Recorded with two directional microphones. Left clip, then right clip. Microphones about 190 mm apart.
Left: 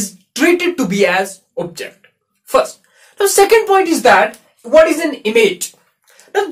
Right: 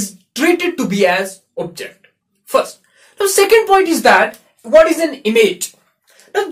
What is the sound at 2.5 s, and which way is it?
Speech, 15° left (ahead or behind).